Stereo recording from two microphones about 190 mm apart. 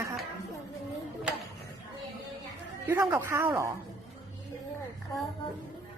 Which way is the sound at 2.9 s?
15° right (ahead or behind).